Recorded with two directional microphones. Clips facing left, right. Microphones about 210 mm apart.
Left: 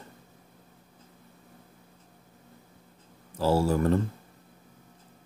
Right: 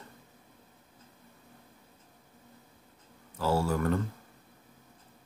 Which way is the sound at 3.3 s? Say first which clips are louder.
Left 4 dB; 30° left (ahead or behind).